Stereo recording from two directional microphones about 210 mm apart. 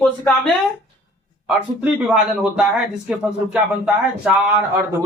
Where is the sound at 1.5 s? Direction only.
5° right (ahead or behind).